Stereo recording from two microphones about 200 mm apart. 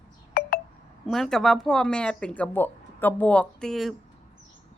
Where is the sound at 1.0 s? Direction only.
Centre (ahead or behind).